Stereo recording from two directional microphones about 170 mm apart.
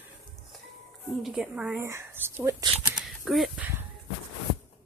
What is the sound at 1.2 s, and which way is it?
Speech, 5° right (ahead or behind).